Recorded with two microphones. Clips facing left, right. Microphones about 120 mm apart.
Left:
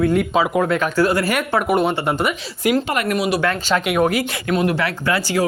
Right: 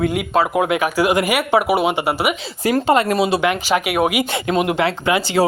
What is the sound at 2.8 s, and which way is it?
Speech, 30° right (ahead or behind).